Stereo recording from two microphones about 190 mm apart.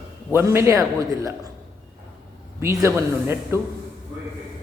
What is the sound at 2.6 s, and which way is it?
A man's voice, 15° right (ahead or behind).